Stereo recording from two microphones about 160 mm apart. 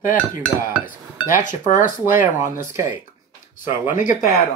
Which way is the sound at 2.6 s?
20° right (ahead or behind).